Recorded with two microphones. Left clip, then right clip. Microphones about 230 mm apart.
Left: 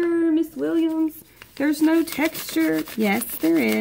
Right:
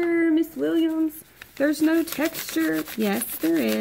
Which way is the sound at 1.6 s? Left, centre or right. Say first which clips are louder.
Left 1 dB; left.